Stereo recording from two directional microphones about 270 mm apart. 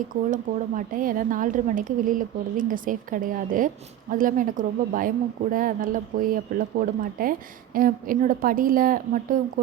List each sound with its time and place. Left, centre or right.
0.8 s a woman's voice: right